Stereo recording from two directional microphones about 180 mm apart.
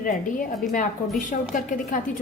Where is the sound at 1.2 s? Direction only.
45° left (ahead or behind).